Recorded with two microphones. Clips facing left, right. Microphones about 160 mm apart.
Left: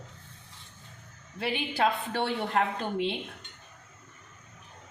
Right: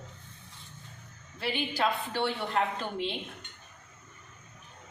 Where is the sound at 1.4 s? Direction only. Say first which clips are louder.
Left 2 dB; 55° left (ahead or behind).